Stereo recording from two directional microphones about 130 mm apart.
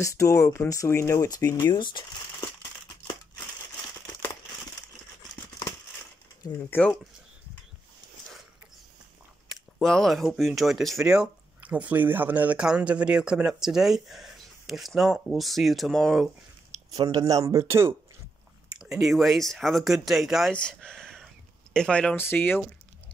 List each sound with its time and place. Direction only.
0.0 s speech: 25° left (ahead or behind)
9.5 s speech: 5° left (ahead or behind)
17.1 s speech: 25° right (ahead or behind)
18.7 s speech: 5° right (ahead or behind); by 22.7 s 15° left (ahead or behind)